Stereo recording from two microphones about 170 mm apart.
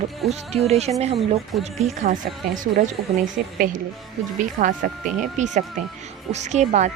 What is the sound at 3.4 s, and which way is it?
Speech, 60° right (ahead or behind).